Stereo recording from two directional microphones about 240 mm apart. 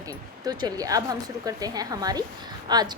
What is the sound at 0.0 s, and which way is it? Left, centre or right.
A woman's voice, centre.